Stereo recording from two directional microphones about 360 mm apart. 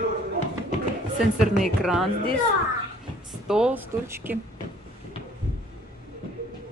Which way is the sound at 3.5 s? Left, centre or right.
Centre.